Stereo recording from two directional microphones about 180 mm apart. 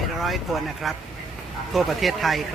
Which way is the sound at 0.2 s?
Centre (ahead or behind).